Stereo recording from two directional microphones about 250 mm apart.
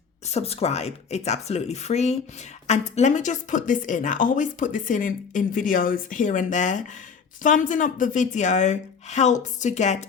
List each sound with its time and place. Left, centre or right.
0.3 s a woman's voice: left